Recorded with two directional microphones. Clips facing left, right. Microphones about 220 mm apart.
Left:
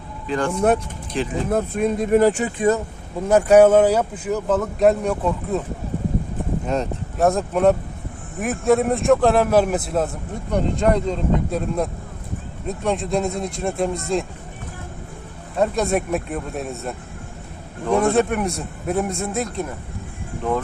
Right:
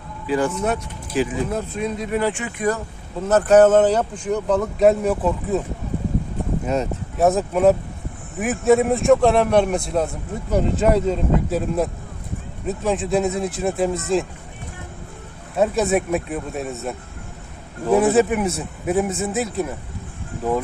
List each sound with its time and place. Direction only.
0.3 s speech: 5° right (ahead or behind)
1.3 s speech: 50° left (ahead or behind)
2.6 s speech: 15° left (ahead or behind); by 5.6 s centre (ahead or behind)
6.7 s speech: centre (ahead or behind)
15.5 s speech: 5° right (ahead or behind)